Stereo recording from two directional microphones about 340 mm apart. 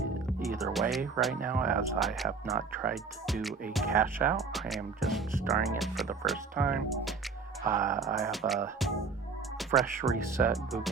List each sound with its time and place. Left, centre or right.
0.4 s speech: centre
1.4 s speech: right
2.0 s speech: centre